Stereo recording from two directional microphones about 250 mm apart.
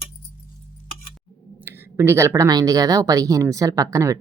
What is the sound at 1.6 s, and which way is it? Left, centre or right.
Speech, centre.